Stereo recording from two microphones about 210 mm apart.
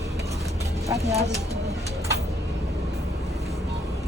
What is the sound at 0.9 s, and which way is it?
Speech, 30° right (ahead or behind).